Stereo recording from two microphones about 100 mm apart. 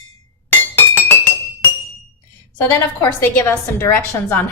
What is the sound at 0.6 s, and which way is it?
Glass, 20° left (ahead or behind).